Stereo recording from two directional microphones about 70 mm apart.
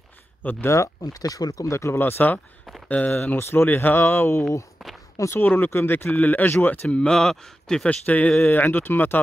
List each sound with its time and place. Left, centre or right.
0.4 s speech: left
1.0 s speech: left
2.0 s speech: left
5.3 s speech: left
6.1 s speech: left
8.0 s speech: left